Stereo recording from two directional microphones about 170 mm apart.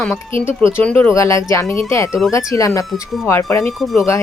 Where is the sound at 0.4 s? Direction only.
10° left (ahead or behind).